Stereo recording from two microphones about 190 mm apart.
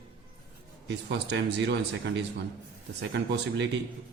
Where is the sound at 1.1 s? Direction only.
65° right (ahead or behind).